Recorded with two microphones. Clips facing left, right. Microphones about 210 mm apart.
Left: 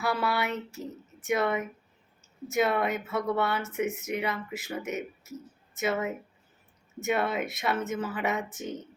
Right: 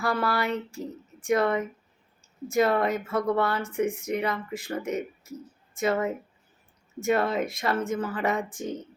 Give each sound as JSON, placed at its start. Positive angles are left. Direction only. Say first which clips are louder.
{"t": 0.0, "sound": "a man's voice", "louder": "right 2 dB", "side_deg": 5}